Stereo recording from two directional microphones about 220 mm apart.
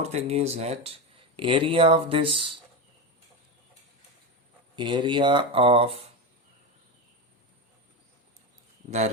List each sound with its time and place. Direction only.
0.0 s speech: 30° right (ahead or behind)
4.8 s speech: 20° right (ahead or behind)
8.8 s speech: 35° right (ahead or behind)